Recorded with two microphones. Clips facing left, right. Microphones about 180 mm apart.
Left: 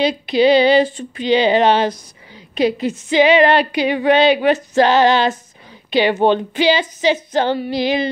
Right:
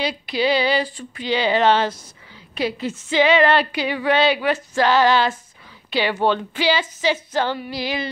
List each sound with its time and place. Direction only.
0.0 s a woman's voice: 20° left (ahead or behind)